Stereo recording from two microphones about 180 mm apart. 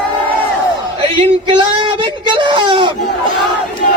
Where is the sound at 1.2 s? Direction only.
25° right (ahead or behind).